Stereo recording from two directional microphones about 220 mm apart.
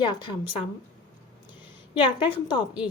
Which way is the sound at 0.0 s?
20° left (ahead or behind).